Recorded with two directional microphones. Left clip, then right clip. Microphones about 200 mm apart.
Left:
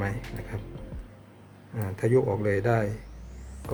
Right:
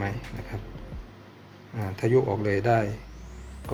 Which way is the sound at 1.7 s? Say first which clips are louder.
Right 1 dB; 10° left (ahead or behind).